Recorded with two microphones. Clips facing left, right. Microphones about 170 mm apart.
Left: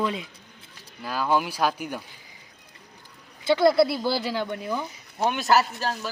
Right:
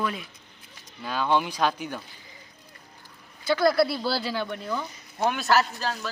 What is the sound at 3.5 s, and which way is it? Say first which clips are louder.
A man's voice: left 3 dB; 25° left (ahead or behind).